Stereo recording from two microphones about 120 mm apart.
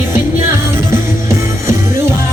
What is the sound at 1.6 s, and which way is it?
Music, 20° right (ahead or behind).